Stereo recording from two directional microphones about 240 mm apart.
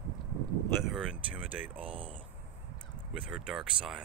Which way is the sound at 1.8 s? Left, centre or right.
Right.